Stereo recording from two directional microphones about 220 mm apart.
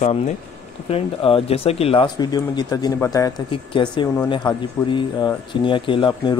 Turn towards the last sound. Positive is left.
turn(degrees=25)  # may be behind; listen again after turning